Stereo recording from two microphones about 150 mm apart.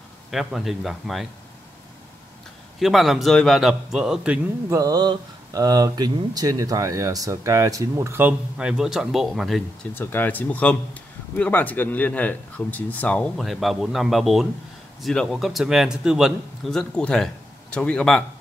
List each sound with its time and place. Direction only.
0.3 s a man's voice: centre (ahead or behind)
2.8 s a man's voice: centre (ahead or behind)
4.6 s speech: 25° right (ahead or behind); by 9.6 s centre (ahead or behind)
9.9 s a man's voice: 15° left (ahead or behind)